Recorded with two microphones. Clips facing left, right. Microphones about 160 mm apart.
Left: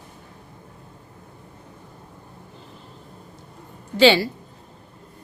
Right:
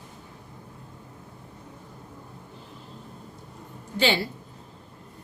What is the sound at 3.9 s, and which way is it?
Speech, 90° left.